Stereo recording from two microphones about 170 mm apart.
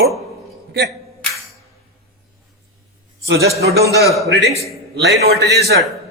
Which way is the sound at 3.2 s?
70° right (ahead or behind).